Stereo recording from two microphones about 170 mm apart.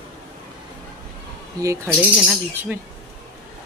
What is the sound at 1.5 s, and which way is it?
Speech, 20° right (ahead or behind).